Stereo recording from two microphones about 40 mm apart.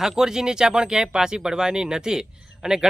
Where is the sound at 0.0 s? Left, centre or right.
Centre.